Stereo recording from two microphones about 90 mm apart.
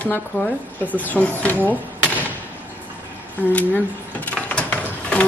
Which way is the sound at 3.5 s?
15° left (ahead or behind).